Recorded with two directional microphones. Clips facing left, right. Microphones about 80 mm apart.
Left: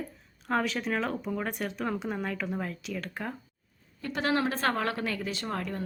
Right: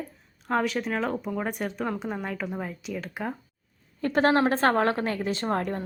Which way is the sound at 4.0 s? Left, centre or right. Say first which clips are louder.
Right 7 dB; right.